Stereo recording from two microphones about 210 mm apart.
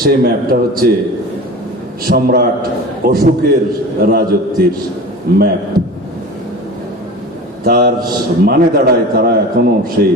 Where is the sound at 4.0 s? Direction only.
45° right (ahead or behind).